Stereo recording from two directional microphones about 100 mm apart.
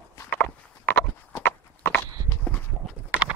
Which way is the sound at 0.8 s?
20° left (ahead or behind).